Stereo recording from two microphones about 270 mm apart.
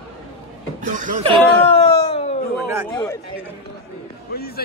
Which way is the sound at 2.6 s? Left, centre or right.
Centre.